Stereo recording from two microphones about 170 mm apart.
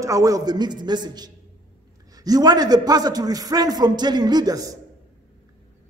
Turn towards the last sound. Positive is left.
turn(degrees=-20)  # may be behind; listen again after turning